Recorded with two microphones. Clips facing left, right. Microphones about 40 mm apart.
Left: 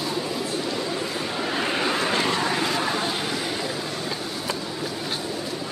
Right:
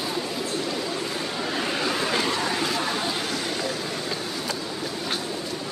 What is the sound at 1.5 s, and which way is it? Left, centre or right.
Vehicle, left.